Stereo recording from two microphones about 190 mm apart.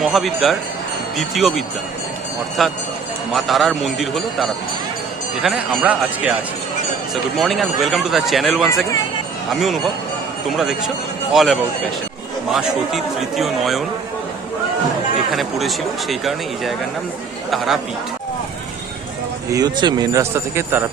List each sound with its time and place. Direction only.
0.0 s speech: centre (ahead or behind)
15.3 s speech: centre (ahead or behind)
19.5 s speech: 20° right (ahead or behind)